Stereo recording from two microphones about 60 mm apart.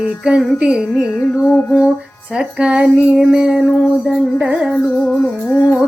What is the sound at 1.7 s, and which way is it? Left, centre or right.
Female singing, centre.